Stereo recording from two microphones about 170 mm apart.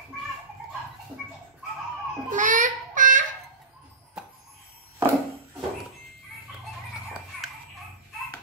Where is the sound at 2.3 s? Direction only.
50° right (ahead or behind).